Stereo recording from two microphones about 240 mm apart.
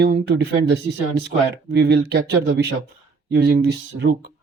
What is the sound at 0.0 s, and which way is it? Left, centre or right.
Speech, right.